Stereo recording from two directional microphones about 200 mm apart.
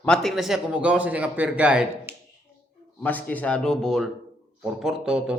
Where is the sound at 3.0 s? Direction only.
10° left (ahead or behind).